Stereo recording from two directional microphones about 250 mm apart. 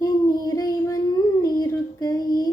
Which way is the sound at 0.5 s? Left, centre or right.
Centre.